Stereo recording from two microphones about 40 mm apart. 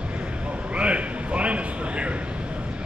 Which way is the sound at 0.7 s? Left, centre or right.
Right.